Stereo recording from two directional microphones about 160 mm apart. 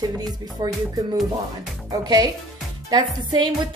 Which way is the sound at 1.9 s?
25° right (ahead or behind).